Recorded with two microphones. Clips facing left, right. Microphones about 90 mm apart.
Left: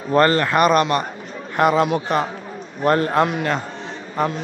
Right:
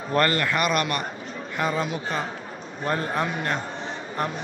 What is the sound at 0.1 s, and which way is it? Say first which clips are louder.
Speech: left 7 dB; 30° left (ahead or behind).